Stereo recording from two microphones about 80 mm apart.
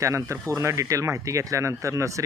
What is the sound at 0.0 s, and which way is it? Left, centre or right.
Speech, right.